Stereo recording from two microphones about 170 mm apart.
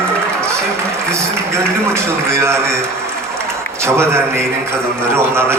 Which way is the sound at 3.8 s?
15° right (ahead or behind).